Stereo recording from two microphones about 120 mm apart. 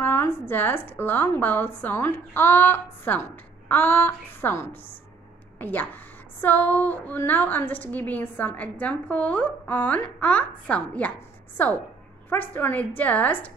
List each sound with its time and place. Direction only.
0.0 s a woman's voice: 20° left (ahead or behind)